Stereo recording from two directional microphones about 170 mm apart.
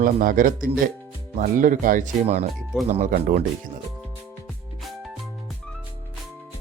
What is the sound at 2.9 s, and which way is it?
Speech, 40° right (ahead or behind).